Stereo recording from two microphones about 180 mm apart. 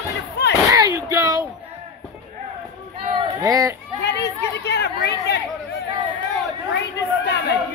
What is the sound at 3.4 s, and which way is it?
Speech, 20° right (ahead or behind).